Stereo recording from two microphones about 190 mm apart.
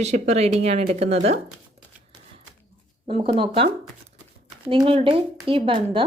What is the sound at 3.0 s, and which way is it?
A woman's voice, 30° right (ahead or behind).